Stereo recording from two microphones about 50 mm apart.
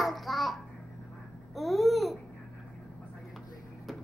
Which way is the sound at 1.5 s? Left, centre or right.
Centre.